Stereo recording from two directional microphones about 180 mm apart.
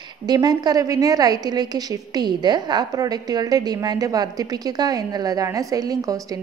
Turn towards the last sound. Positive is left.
turn(degrees=-20)  # may be behind; listen again after turning